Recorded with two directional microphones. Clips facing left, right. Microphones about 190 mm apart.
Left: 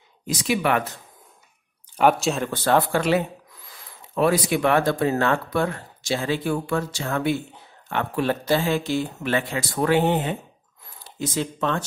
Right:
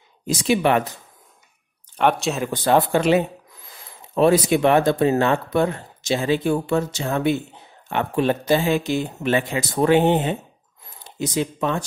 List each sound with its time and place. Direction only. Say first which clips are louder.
0.3 s speech: right 4 dB; 25° right (ahead or behind)
2.0 s speech: left 1 dB; centre (ahead or behind)
2.5 s speech: right 4 dB; 15° right (ahead or behind)